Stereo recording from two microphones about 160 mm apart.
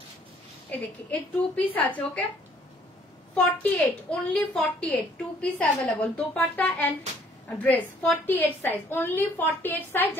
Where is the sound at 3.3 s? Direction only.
10° left (ahead or behind).